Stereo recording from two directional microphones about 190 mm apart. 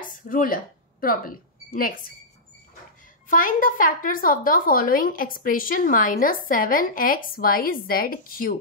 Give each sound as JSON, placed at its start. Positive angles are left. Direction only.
{"t": 0.0, "sound": "a sound", "side_deg": 45}
{"t": 1.0, "sound": "speech", "side_deg": 50}
{"t": 3.3, "sound": "a woman's voice", "side_deg": 45}